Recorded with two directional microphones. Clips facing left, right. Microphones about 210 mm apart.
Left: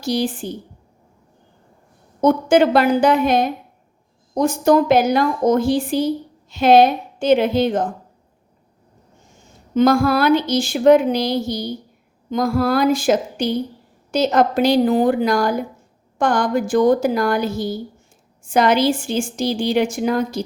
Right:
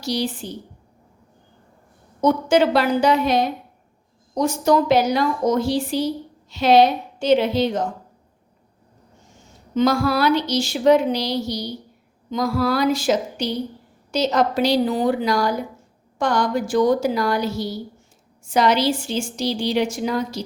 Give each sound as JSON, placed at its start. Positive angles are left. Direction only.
{"t": 0.0, "sound": "a woman's voice", "side_deg": 50}
{"t": 2.2, "sound": "a woman's voice", "side_deg": 50}
{"t": 9.7, "sound": "a woman's voice", "side_deg": 50}